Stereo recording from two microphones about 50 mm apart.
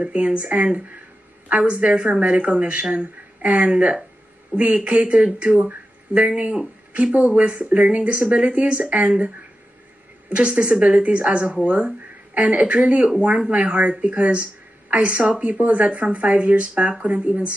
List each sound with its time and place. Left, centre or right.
0.0 s a woman's voice: right
10.3 s a woman's voice: right